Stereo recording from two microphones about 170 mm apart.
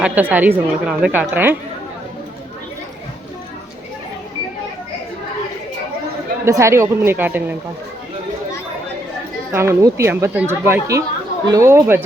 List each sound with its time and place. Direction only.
0.0 s speech: 10° right (ahead or behind)
6.4 s speech: 15° right (ahead or behind)
9.5 s speech: 15° right (ahead or behind)